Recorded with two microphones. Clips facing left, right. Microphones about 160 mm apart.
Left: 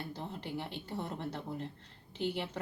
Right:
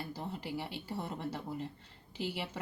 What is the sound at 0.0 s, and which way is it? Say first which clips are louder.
Speech: right 1 dB; 5° right (ahead or behind).